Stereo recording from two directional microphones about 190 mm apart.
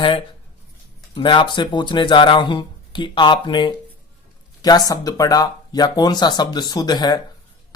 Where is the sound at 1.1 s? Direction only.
25° left (ahead or behind).